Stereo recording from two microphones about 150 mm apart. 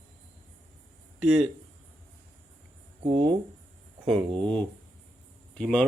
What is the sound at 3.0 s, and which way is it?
Speech, 35° right (ahead or behind).